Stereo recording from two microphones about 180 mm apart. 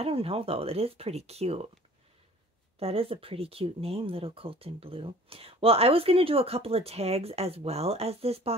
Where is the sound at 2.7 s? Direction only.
35° right (ahead or behind).